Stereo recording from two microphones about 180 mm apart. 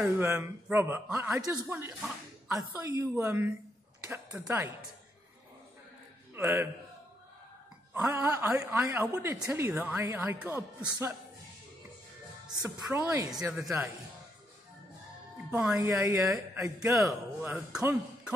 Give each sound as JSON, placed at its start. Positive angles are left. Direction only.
{"t": 0.0, "sound": "a woman's voice", "side_deg": -15}
{"t": 6.3, "sound": "a man's voice", "side_deg": -15}
{"t": 7.9, "sound": "a woman's voice", "side_deg": -10}
{"t": 12.5, "sound": "a woman's voice", "side_deg": -20}
{"t": 13.3, "sound": "speech", "side_deg": 0}
{"t": 15.3, "sound": "a woman's voice", "side_deg": -5}
{"t": 16.9, "sound": "a woman's voice", "side_deg": -5}